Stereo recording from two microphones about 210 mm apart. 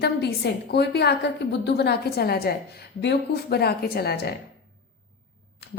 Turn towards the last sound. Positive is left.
turn(degrees=50)  # may be behind; listen again after turning